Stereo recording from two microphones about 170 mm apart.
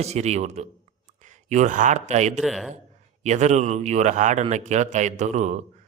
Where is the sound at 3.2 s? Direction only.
45° right (ahead or behind).